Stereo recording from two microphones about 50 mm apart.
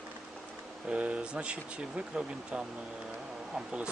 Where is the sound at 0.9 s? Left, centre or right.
Right.